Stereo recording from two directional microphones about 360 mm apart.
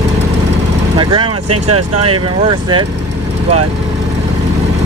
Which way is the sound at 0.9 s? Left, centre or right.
Centre.